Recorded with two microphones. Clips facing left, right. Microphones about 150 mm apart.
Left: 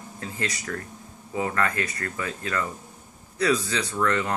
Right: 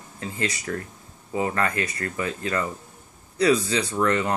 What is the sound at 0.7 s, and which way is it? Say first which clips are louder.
Speech: right 3 dB; 30° right (ahead or behind).